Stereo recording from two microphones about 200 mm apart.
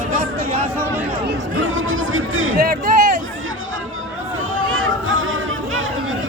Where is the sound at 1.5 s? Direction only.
80° right.